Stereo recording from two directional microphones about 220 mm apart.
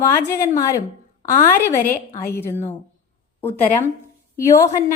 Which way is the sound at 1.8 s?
40° left (ahead or behind).